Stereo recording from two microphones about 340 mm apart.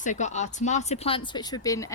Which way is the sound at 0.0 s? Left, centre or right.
Left.